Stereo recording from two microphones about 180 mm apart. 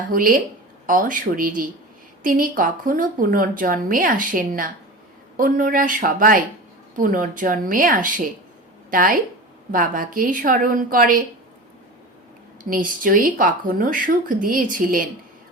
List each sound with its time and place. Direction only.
0.1 s a woman's voice: 50° right (ahead or behind)
12.6 s a woman's voice: 50° right (ahead or behind)